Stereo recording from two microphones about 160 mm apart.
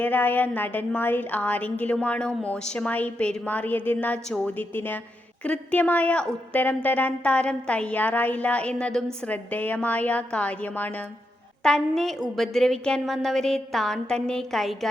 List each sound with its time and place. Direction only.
0.0 s a woman's voice: 10° left (ahead or behind)